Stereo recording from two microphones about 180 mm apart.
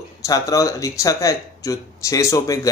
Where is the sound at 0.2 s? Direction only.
20° left (ahead or behind).